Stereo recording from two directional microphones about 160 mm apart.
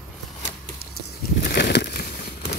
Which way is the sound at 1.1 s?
90° left.